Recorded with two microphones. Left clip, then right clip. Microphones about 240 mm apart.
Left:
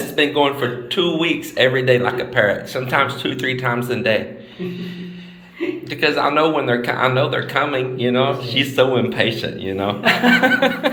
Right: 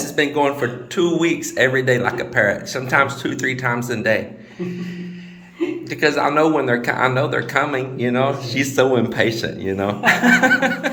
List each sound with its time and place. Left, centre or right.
0.2 s speech: right
6.0 s speech: right